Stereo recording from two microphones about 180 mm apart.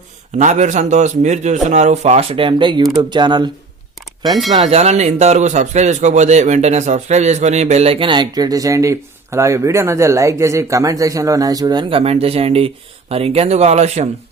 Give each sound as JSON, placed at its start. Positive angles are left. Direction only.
{"t": 0.3, "sound": "speech", "side_deg": -40}
{"t": 4.5, "sound": "speech", "side_deg": -35}